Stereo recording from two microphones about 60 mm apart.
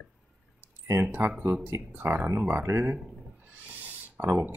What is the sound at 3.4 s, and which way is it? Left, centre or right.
Owl, right.